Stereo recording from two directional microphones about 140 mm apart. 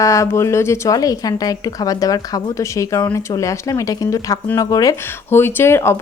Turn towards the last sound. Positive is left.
turn(degrees=20)  # may be behind; listen again after turning